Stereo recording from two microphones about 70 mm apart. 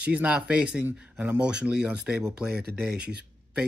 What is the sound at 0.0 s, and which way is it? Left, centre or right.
Speech, centre.